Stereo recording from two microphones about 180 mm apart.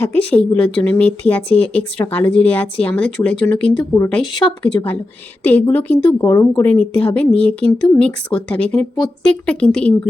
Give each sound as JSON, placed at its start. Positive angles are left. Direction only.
{"t": 0.3, "sound": "speech", "side_deg": 5}
{"t": 4.4, "sound": "speech", "side_deg": 25}
{"t": 5.4, "sound": "speech", "side_deg": 10}